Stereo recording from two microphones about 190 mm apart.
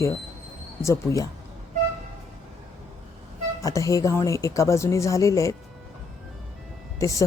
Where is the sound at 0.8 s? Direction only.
15° left (ahead or behind).